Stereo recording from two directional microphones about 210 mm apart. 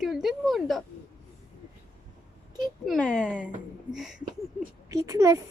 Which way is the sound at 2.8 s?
Centre (ahead or behind).